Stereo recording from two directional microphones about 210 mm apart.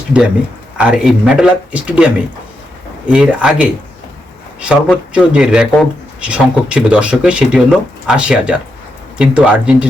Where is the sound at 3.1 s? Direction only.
5° right (ahead or behind).